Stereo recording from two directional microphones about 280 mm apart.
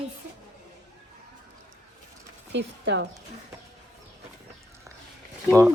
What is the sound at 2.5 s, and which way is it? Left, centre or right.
Speech, right.